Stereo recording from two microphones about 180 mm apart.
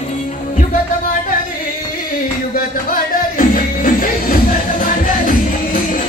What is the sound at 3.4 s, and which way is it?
Music, 50° left (ahead or behind).